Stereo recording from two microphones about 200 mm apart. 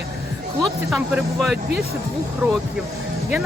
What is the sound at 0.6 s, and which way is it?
Speech, centre (ahead or behind).